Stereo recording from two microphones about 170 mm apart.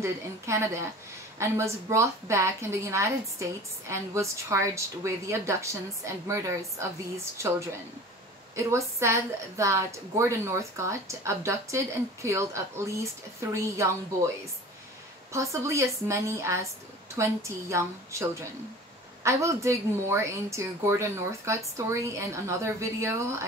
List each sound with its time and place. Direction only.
0.0 s a woman's voice: 15° right (ahead or behind)
8.5 s a woman's voice: 15° right (ahead or behind)
15.3 s a woman's voice: 15° right (ahead or behind)